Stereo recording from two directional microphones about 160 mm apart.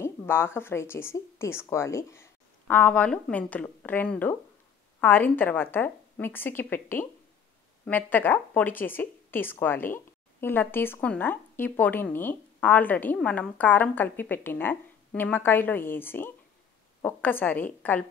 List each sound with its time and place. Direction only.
0.0 s speech: 15° left (ahead or behind)